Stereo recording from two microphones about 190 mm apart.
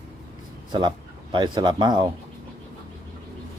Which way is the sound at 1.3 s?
25° right (ahead or behind).